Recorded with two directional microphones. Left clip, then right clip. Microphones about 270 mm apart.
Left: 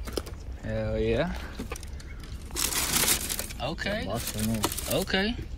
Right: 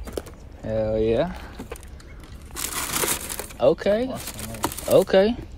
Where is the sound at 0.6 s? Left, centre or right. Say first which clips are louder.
Right 7 dB; centre.